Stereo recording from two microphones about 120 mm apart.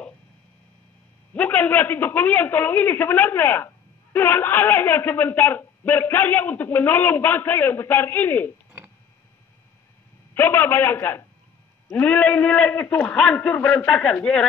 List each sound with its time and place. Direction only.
1.3 s a man's voice: 15° left (ahead or behind)
10.3 s a man's voice: 20° left (ahead or behind)